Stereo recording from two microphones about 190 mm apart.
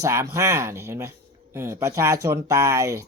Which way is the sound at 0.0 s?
15° right (ahead or behind).